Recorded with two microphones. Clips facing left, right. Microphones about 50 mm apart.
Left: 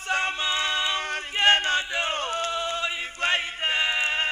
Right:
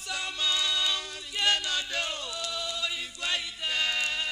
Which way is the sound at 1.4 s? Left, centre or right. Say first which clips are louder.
Left 7 dB; left.